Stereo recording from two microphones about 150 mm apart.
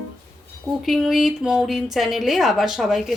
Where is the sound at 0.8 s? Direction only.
Centre (ahead or behind).